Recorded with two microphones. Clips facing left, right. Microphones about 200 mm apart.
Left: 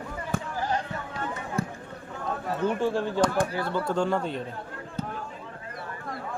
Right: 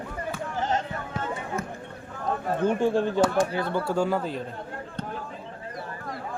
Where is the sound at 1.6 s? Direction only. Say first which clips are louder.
Left 4 dB; 35° left (ahead or behind).